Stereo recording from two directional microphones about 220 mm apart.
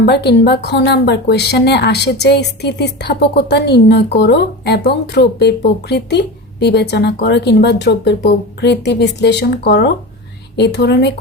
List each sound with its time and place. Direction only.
0.0 s speech: 50° left (ahead or behind)